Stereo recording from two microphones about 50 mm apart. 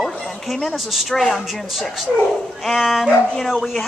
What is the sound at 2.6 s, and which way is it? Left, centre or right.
Speech, centre.